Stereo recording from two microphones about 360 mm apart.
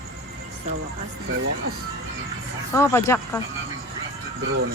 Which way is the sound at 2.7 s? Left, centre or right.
Centre.